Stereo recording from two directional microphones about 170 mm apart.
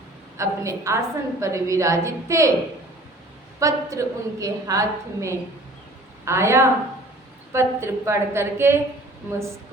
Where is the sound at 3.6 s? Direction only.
20° right (ahead or behind).